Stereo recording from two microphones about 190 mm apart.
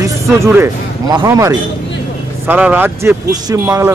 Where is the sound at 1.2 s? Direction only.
20° right (ahead or behind).